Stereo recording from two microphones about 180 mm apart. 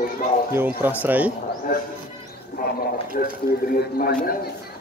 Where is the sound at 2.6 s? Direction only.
50° left (ahead or behind).